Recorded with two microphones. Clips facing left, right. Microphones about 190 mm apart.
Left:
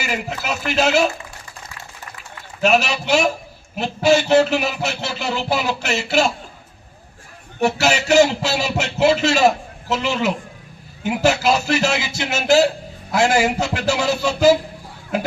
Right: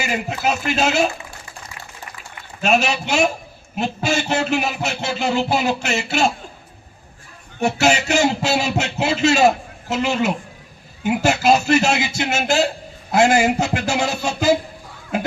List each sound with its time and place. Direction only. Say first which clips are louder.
0.0 s speech: right 3 dB; 50° right (ahead or behind)
2.7 s speech: right 1 dB; 50° right (ahead or behind)
7.6 s speech: right 1 dB; 50° right (ahead or behind)